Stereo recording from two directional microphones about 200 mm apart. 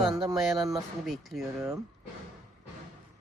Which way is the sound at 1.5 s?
15° right (ahead or behind).